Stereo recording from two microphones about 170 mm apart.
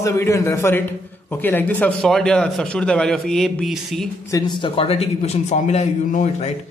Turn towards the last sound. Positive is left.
turn(degrees=45)  # may be behind; listen again after turning